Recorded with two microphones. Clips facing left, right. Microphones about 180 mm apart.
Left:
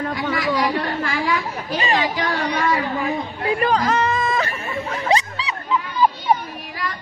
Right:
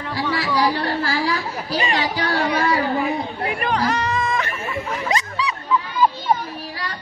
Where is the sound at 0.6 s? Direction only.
35° right (ahead or behind).